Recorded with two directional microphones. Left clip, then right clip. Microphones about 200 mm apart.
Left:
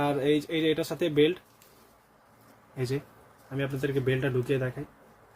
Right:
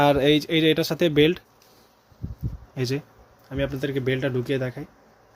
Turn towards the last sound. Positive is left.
turn(degrees=-40)  # may be behind; listen again after turning